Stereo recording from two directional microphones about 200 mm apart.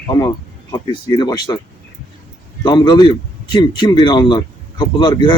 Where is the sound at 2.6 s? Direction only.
25° left (ahead or behind).